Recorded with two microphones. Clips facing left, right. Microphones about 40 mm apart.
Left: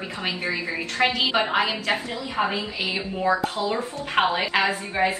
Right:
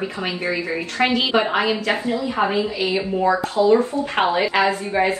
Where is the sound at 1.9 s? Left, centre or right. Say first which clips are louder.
Right 5 dB; right.